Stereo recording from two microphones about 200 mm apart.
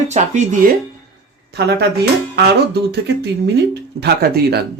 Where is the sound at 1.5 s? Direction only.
55° right (ahead or behind).